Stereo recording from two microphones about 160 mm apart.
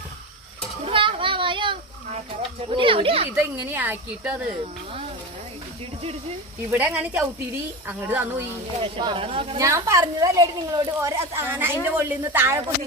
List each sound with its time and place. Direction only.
0.9 s a sound: 35° right (ahead or behind)
2.6 s speech: 35° right (ahead or behind)
3.3 s a woman's voice: 10° right (ahead or behind)
6.7 s a woman's voice: 10° right (ahead or behind)
8.8 s speech: 30° right (ahead or behind)
9.6 s a woman's voice: 20° right (ahead or behind)